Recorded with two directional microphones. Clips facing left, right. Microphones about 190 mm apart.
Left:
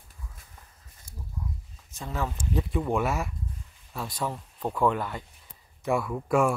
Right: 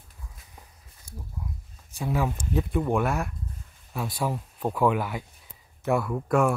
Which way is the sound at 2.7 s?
Centre (ahead or behind).